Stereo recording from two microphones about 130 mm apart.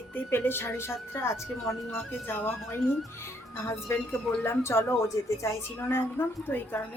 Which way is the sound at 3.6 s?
20° left (ahead or behind).